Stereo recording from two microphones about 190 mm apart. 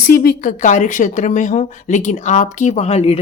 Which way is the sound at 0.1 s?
50° left (ahead or behind).